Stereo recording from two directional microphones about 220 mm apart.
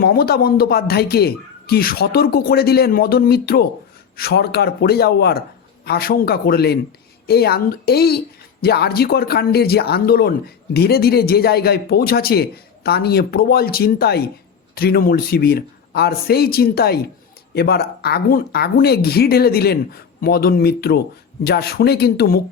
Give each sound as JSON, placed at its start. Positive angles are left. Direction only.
{"t": 0.0, "sound": "speech", "side_deg": 45}